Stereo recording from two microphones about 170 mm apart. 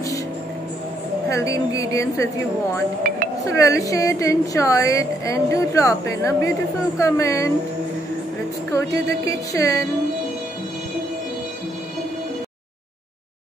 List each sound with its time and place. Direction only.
1.3 s a woman's voice: 20° left (ahead or behind)
8.7 s a woman's voice: 20° left (ahead or behind)